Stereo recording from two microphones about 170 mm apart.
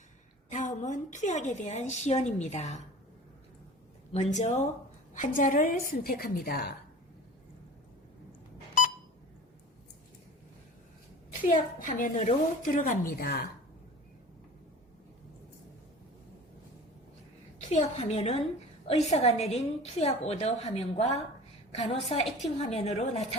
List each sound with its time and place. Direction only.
0.5 s a woman's voice: 45° left (ahead or behind)
4.1 s a woman's voice: 40° left (ahead or behind); by 6.7 s 65° left (ahead or behind)
11.4 s a woman's voice: 50° left (ahead or behind)
17.7 s a woman's voice: 40° left (ahead or behind)